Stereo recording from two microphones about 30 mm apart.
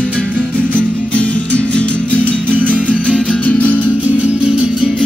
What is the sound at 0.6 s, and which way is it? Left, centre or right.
Music, right.